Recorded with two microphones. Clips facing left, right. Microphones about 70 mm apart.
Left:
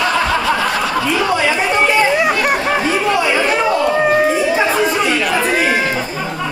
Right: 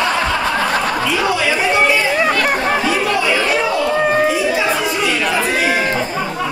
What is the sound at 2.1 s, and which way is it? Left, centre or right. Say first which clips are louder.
Chatter: left 1 dB; centre.